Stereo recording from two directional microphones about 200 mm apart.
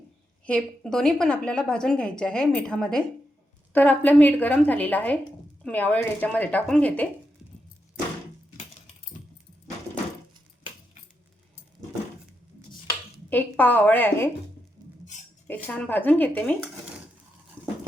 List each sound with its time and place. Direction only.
0.4 s a woman's voice: 5° left (ahead or behind)
13.3 s a woman's voice: 10° left (ahead or behind)
14.8 s rodents: 20° right (ahead or behind)
15.4 s a woman's voice: 10° left (ahead or behind)